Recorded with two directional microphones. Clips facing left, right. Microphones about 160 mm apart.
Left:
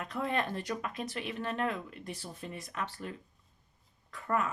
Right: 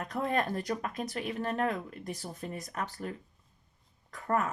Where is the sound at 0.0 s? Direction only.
40° right (ahead or behind).